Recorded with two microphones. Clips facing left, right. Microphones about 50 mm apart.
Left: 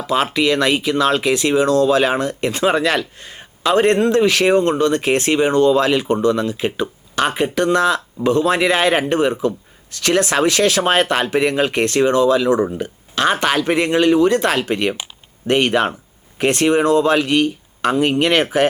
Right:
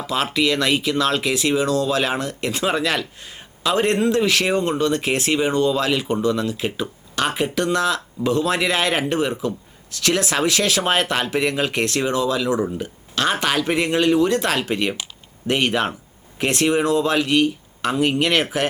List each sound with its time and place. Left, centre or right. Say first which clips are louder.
0.3 s speech: even; centre